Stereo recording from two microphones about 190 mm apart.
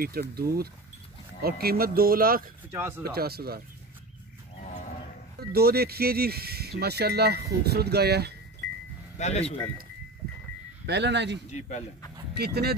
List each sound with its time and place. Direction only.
0.0 s speech: 55° right (ahead or behind)
5.4 s speech: 55° right (ahead or behind)
9.2 s speech: 35° left (ahead or behind)
10.9 s speech: 65° right (ahead or behind)
11.5 s speech: 40° left (ahead or behind)
12.4 s speech: 55° right (ahead or behind)